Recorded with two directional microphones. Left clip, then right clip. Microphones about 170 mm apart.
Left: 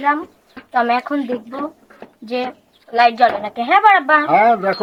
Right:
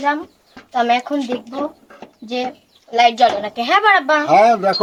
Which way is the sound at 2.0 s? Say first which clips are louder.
Left 1 dB; centre (ahead or behind).